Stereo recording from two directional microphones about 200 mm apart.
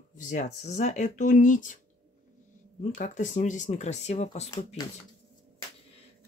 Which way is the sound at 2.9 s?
35° left (ahead or behind).